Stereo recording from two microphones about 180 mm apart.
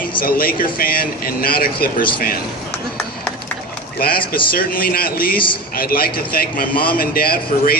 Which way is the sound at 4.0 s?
55° left (ahead or behind).